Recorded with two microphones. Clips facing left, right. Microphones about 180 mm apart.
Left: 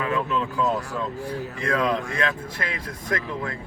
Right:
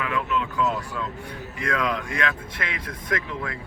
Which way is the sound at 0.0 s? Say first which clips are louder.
Left 2 dB; 30° left (ahead or behind).